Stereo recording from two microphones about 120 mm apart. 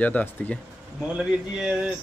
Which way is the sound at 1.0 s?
10° right (ahead or behind).